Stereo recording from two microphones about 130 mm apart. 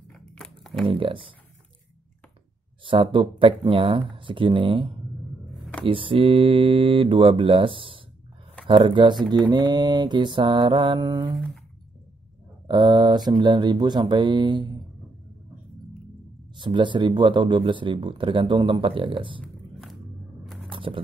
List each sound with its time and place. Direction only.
0.1 s a sound: 5° left (ahead or behind)
0.8 s speech: 40° right (ahead or behind)
2.8 s speech: 40° right (ahead or behind)
12.6 s speech: 35° right (ahead or behind)
16.5 s speech: 40° right (ahead or behind)
20.7 s scratch: 40° right (ahead or behind)